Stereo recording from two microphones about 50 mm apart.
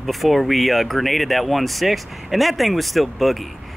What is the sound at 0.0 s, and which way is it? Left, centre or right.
Speech, centre.